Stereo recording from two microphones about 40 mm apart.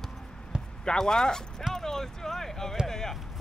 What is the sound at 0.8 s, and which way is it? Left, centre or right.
Speech, centre.